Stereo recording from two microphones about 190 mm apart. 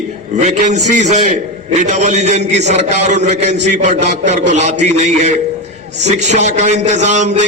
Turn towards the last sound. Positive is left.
turn(degrees=-40)  # may be behind; listen again after turning